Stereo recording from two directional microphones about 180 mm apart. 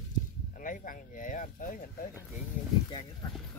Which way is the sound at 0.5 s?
50° left (ahead or behind).